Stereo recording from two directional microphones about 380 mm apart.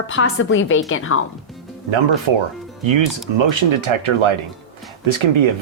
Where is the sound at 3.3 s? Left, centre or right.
Right.